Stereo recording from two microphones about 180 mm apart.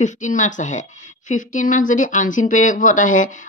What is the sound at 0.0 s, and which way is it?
Speech, 45° left (ahead or behind).